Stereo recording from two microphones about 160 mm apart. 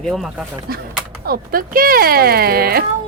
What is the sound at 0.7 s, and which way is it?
Speech, 70° right (ahead or behind).